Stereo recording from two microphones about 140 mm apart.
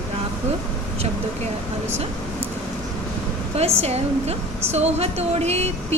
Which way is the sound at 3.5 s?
50° right (ahead or behind).